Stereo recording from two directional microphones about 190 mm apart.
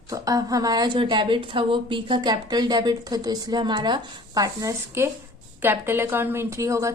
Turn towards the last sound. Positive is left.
turn(degrees=-15)  # may be behind; listen again after turning